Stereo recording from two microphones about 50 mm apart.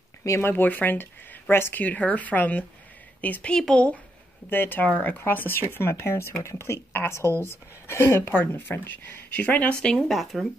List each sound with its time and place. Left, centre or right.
0.4 s speech: left
1.5 s speech: left
1.8 s a woman's voice: left
3.4 s speech: centre
3.7 s speech: left
4.5 s a woman's voice: left
8.3 s speech: left
9.5 s speech: left
9.9 s speech: centre